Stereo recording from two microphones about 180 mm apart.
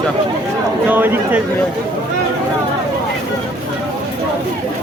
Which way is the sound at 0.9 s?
10° right (ahead or behind).